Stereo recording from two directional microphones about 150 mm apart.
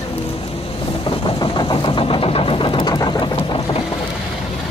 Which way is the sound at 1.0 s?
30° left (ahead or behind).